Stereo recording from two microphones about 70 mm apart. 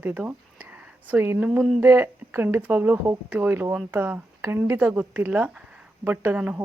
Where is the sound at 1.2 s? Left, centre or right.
Right.